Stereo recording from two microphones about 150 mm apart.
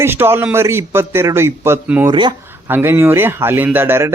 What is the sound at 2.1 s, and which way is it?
Speech, 30° right (ahead or behind).